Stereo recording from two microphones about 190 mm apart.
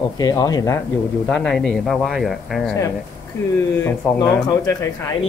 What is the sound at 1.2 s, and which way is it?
Speech, 5° left (ahead or behind).